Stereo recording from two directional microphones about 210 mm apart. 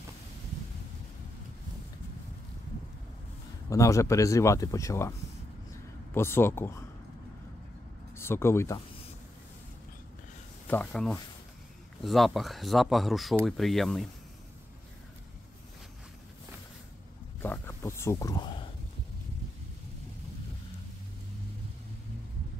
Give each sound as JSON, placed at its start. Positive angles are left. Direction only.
{"t": 3.7, "sound": "speech", "side_deg": 15}
{"t": 6.1, "sound": "speech", "side_deg": 10}
{"t": 8.2, "sound": "speech", "side_deg": 10}
{"t": 10.7, "sound": "speech", "side_deg": 5}
{"t": 17.4, "sound": "a sound", "side_deg": 10}